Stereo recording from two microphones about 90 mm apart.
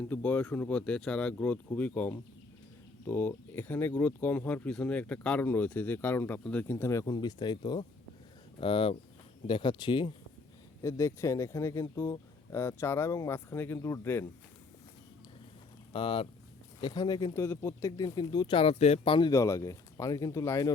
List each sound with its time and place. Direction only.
0.1 s speech: 20° left (ahead or behind)
7.0 s speech: 50° left (ahead or behind)
8.5 s speech: 80° left
9.5 s speech: 65° left (ahead or behind)
10.8 s speech: 35° left (ahead or behind)
15.9 s speech: 80° left
16.8 s speech: 50° left (ahead or behind)
17.3 s speech: 30° left (ahead or behind); by 18.5 s 55° left (ahead or behind)
18.5 s speech: 75° left (ahead or behind)
19.3 s speech: 35° left (ahead or behind)